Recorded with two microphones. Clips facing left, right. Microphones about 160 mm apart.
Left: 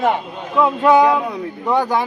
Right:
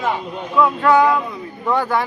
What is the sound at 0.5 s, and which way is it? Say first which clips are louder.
A man's voice: left 1 dB; 20° left (ahead or behind).